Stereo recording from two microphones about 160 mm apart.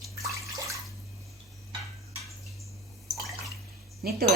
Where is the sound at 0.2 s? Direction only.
20° right (ahead or behind).